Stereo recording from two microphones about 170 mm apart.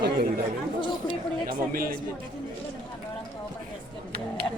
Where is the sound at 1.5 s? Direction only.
60° right (ahead or behind).